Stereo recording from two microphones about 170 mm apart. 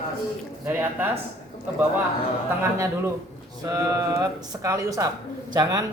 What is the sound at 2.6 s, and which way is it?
A man's voice, 15° right (ahead or behind).